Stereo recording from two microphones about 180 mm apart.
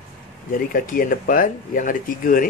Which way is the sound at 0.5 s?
50° left (ahead or behind).